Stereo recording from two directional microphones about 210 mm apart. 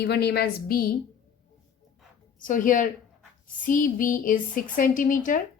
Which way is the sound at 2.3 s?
40° left (ahead or behind).